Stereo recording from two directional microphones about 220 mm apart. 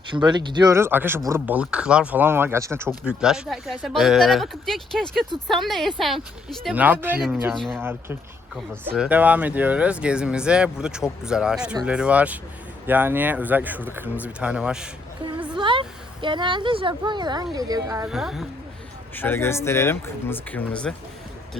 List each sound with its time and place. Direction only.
0.1 s speech: 20° right (ahead or behind); by 7.8 s centre (ahead or behind)
7.8 s speech: 10° right (ahead or behind)
15.5 s a woman's voice: 20° right (ahead or behind)
18.1 s speech: centre (ahead or behind)
19.1 s speech: 10° left (ahead or behind)